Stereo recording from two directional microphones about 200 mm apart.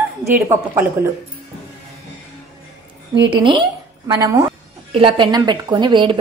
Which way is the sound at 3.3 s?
25° right (ahead or behind).